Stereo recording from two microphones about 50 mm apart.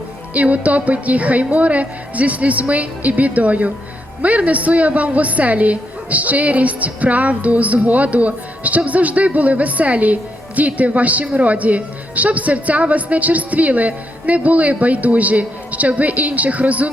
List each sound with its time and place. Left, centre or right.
0.3 s a woman's voice: right